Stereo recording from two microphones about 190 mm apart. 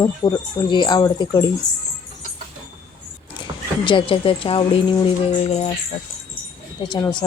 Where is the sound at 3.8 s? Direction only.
25° left (ahead or behind).